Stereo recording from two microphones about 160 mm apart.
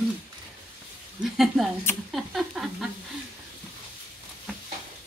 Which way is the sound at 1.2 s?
Centre (ahead or behind).